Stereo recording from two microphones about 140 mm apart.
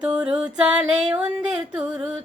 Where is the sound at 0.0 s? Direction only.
5° right (ahead or behind).